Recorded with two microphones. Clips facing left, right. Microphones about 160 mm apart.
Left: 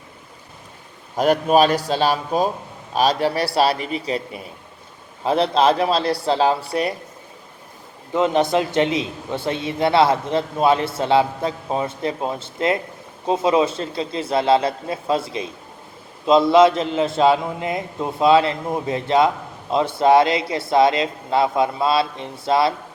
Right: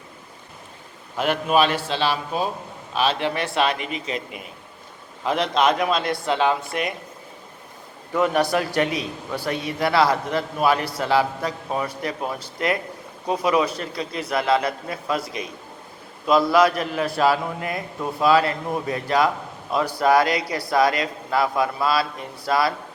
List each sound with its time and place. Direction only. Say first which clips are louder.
1.1 s speech: left 4 dB; 40° left (ahead or behind)
8.1 s a man's voice: left 2 dB; 20° left (ahead or behind)